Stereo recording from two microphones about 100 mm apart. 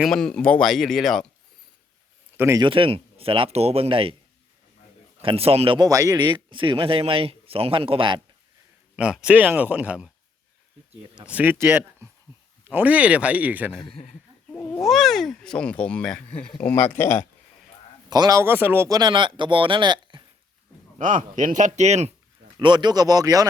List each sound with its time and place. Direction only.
0.0 s speech: 5° left (ahead or behind)
2.6 s speech: 60° right (ahead or behind)
5.2 s speech: 70° right (ahead or behind)
5.8 s speech: 35° right (ahead or behind)
6.1 s speech: 50° right (ahead or behind)
9.0 s speech: 10° right (ahead or behind)
11.3 s speech: 15° right (ahead or behind)
11.5 s speech: 25° right (ahead or behind)
14.8 s speech: centre (ahead or behind); by 17.2 s 25° left (ahead or behind)
18.1 s speech: 40° right (ahead or behind)
18.4 s speech: 20° right (ahead or behind)
18.9 s speech: 45° right (ahead or behind)
21.8 s speech: 90° right
22.5 s speech: 50° right (ahead or behind)